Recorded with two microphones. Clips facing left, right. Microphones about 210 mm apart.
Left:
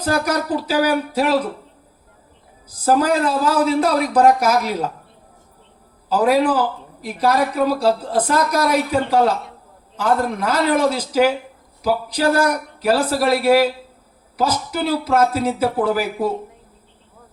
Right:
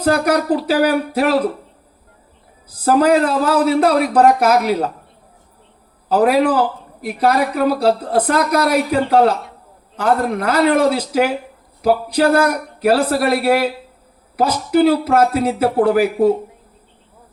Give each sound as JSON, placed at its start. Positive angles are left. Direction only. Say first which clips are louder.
{"t": 0.0, "sound": "a woman's voice", "louder": "right 4 dB", "side_deg": -60}
{"t": 2.6, "sound": "a woman's voice", "louder": "right 3 dB", "side_deg": -60}
{"t": 6.1, "sound": "a woman's voice", "louder": "right 2 dB", "side_deg": -60}